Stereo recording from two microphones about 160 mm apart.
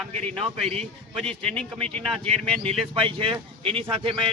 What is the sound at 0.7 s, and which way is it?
Speech, 40° right (ahead or behind).